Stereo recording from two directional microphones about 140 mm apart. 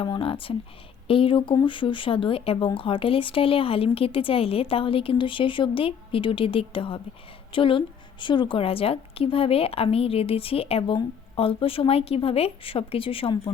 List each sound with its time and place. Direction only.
0.0 s a woman's voice: 40° left (ahead or behind)